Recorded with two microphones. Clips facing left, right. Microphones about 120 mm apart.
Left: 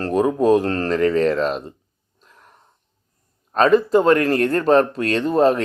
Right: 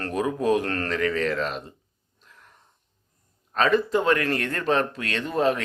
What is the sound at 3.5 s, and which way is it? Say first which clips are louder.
Speech: left 7 dB; 35° left (ahead or behind).